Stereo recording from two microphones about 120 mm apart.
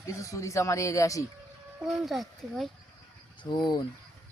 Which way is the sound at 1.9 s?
Centre (ahead or behind).